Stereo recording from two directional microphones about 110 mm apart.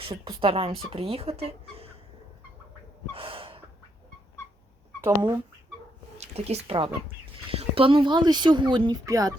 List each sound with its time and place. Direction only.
0.0 s speech: 50° right (ahead or behind)
3.1 s gasp: 55° right (ahead or behind)
4.9 s a sound: 25° right (ahead or behind)
6.1 s speech: 75° right (ahead or behind); by 9.0 s 45° right (ahead or behind)
9.0 s speech: 30° right (ahead or behind)